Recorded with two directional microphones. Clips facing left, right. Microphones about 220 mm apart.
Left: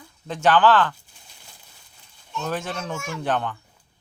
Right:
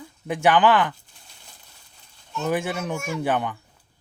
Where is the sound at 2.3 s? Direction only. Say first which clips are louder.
Right 4 dB; 10° right (ahead or behind).